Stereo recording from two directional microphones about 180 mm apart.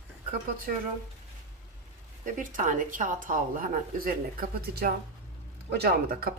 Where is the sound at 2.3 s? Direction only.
45° right (ahead or behind).